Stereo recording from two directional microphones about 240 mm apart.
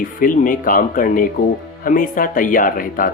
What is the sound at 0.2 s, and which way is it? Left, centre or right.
Speech, left.